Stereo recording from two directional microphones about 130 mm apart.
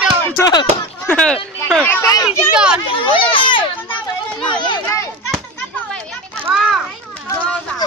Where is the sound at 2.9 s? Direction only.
40° left (ahead or behind).